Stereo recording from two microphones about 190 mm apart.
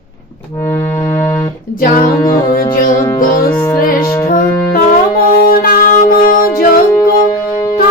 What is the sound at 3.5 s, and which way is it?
Music, 15° left (ahead or behind).